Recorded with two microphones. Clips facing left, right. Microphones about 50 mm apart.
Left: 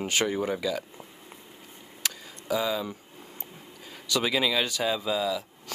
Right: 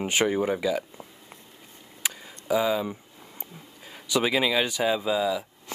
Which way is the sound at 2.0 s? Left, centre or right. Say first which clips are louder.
Right 1 dB; centre.